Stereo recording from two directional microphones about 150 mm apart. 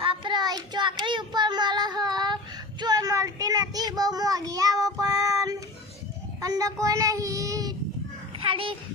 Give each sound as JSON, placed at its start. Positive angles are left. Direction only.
{"t": 0.0, "sound": "child singing", "side_deg": -35}
{"t": 8.4, "sound": "a child's voice", "side_deg": -35}